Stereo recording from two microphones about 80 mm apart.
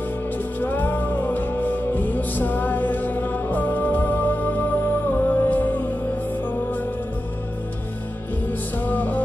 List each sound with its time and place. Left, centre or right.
0.6 s music: left
8.5 s music: left